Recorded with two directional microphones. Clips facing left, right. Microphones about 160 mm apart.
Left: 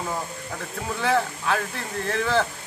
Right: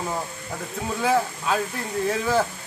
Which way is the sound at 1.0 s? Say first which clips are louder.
Right 1 dB; 10° right (ahead or behind).